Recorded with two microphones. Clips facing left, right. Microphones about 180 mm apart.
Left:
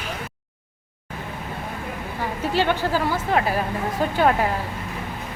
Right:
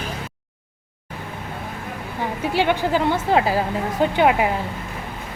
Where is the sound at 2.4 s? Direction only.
15° right (ahead or behind).